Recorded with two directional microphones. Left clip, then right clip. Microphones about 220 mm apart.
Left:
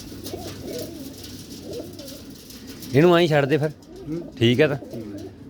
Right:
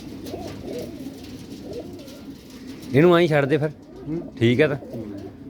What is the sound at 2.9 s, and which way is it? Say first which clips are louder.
Speech: even; 10° left (ahead or behind).